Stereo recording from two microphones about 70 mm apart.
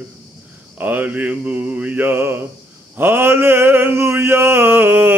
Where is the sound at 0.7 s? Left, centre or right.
Right.